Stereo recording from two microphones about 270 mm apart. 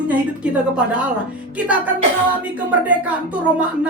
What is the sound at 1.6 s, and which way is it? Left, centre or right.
Speech, centre.